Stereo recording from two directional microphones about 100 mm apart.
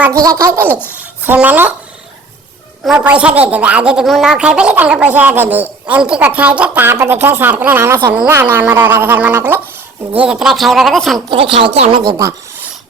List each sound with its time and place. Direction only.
0.1 s a woman's voice: 35° right (ahead or behind); by 1.7 s 15° right (ahead or behind)
2.8 s a woman's voice: 10° right (ahead or behind)
10.2 s speech: 5° right (ahead or behind)
11.3 s speech: 65° right (ahead or behind)
12.0 s speech: 40° right (ahead or behind)